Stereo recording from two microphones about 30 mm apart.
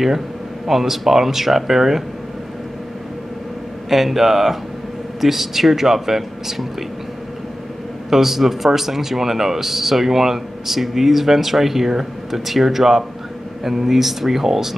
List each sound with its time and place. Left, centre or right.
0.7 s speech: centre
3.9 s speech: centre
8.1 s speech: centre